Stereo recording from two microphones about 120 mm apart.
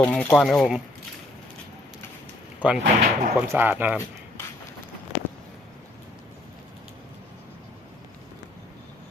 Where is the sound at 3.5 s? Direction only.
15° right (ahead or behind).